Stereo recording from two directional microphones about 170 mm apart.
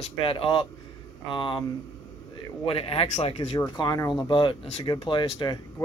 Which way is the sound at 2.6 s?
35° left (ahead or behind).